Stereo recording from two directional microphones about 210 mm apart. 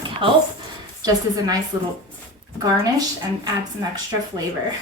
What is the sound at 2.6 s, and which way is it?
Speech, 15° right (ahead or behind).